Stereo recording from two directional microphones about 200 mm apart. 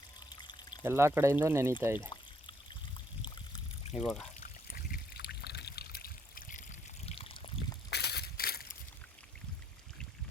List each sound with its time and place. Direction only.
0.3 s pour: 20° left (ahead or behind)
0.9 s speech: 10° right (ahead or behind)
3.2 s trickle: 25° left (ahead or behind)
3.9 s speech: centre (ahead or behind)
4.7 s trickle: 50° left (ahead or behind); by 7.8 s 25° left (ahead or behind)
7.9 s crushing: 55° left (ahead or behind)